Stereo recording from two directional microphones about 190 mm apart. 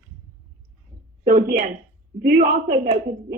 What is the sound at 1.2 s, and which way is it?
A woman's voice, 45° right (ahead or behind).